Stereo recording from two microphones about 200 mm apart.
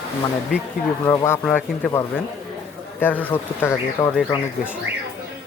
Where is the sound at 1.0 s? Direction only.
15° left (ahead or behind).